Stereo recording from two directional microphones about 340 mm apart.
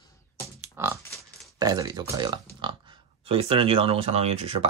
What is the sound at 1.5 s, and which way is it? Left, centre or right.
Speech, centre.